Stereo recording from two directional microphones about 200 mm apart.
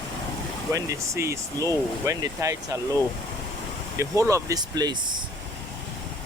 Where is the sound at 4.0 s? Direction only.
15° right (ahead or behind).